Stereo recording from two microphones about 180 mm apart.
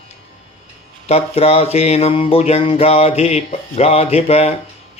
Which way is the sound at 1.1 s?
35° left (ahead or behind).